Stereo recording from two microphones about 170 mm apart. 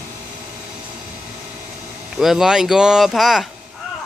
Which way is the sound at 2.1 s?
Centre (ahead or behind).